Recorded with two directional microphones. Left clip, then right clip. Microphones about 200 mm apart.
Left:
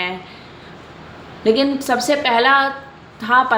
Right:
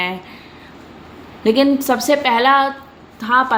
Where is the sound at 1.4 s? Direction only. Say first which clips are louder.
Right 2 dB; 25° right (ahead or behind).